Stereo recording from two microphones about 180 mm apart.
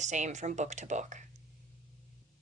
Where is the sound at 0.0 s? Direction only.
40° right (ahead or behind).